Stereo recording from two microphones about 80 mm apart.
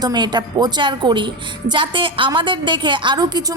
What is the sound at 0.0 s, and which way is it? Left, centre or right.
A woman's voice, right.